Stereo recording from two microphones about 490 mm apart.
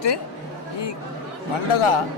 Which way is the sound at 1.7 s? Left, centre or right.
Left.